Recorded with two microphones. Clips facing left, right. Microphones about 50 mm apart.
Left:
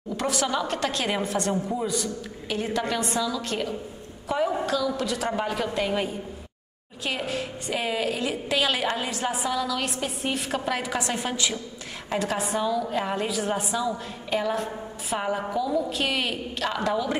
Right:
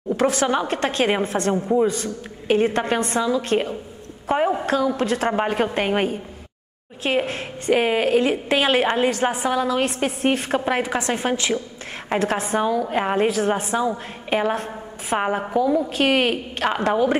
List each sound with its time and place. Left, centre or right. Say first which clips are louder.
0.2 s a woman's voice: right 6 dB; right
4.3 s a sound: right 5 dB; right
4.6 s a woman's voice: right 5 dB; right
10.6 s a woman's voice: right 5 dB; right